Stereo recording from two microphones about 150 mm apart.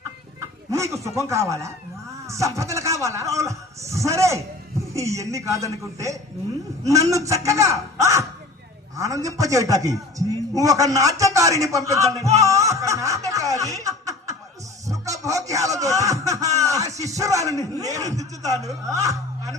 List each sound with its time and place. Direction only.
0.3 s a man's voice: 20° right (ahead or behind)
13.7 s snicker: 20° right (ahead or behind)
14.8 s speech: 20° right (ahead or behind)